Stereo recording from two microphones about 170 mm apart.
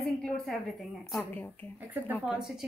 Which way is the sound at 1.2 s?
10° left (ahead or behind).